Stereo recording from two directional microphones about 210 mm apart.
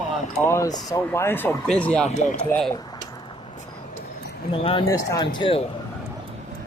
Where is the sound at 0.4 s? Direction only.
15° left (ahead or behind).